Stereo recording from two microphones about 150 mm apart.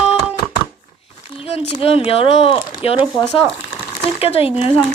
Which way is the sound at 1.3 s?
40° left (ahead or behind).